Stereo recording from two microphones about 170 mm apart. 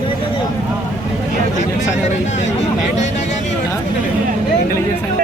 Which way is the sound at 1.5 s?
45° left (ahead or behind).